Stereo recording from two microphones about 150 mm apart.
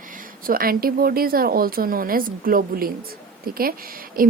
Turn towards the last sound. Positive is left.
turn(degrees=-70)  # may be behind; listen again after turning